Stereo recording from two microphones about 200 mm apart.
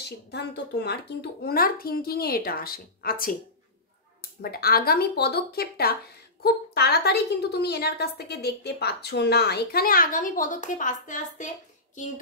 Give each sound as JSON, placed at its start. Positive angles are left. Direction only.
{"t": 0.0, "sound": "a woman's voice", "side_deg": 55}